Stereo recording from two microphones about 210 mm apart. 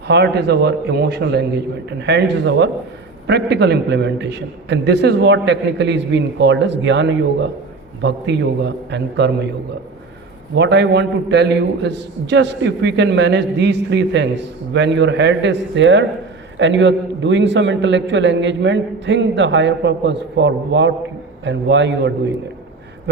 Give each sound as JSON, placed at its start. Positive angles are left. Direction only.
{"t": 0.1, "sound": "a man's voice", "side_deg": -50}
{"t": 10.5, "sound": "a man's voice", "side_deg": -55}